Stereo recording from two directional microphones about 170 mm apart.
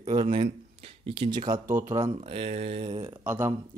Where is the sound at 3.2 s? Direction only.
15° right (ahead or behind).